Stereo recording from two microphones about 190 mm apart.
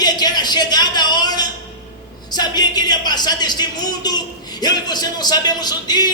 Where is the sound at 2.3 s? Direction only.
20° left (ahead or behind).